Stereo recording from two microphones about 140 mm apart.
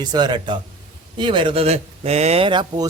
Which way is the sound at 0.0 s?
30° right (ahead or behind).